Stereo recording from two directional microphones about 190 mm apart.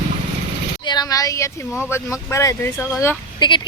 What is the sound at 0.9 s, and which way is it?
Speech, 20° left (ahead or behind).